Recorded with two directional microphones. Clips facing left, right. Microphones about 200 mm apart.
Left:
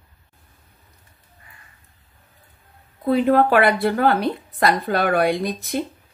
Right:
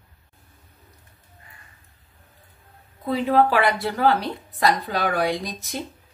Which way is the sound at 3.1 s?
55° left (ahead or behind).